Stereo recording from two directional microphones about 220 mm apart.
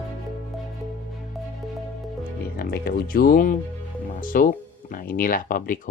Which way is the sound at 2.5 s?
45° left (ahead or behind).